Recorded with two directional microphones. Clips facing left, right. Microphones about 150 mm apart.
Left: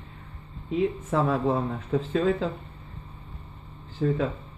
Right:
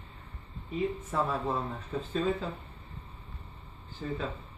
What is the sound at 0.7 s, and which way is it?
Speech, 80° left.